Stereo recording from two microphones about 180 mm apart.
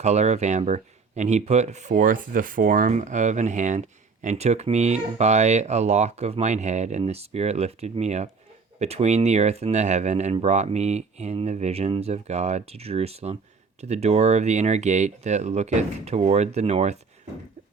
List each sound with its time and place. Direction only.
0.0 s speech: 40° right (ahead or behind)